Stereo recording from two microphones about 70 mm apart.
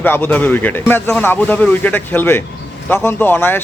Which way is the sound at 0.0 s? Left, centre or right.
Left.